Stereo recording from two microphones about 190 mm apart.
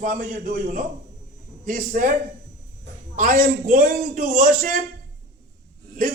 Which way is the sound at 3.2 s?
45° right (ahead or behind).